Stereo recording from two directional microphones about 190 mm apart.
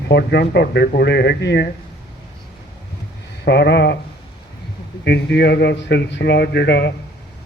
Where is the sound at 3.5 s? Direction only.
60° left (ahead or behind).